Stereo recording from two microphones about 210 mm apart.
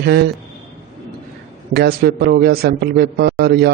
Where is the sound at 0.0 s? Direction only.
50° right (ahead or behind).